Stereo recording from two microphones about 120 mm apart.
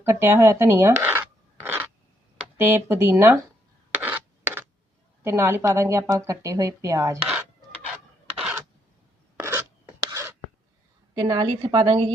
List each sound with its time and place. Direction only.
0.0 s a sound: 20° right (ahead or behind)
2.6 s speech: 20° right (ahead or behind)
3.9 s rub: 15° right (ahead or behind)
5.2 s speech: 25° right (ahead or behind)
9.4 s filing: 20° right (ahead or behind)
10.1 s a sound: 25° right (ahead or behind)
11.1 s a woman's voice: 30° right (ahead or behind)